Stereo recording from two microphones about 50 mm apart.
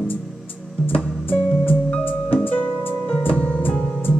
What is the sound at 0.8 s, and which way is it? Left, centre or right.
Music, left.